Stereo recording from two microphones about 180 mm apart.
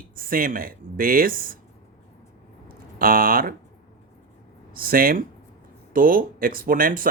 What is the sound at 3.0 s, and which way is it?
Speech, 55° right (ahead or behind).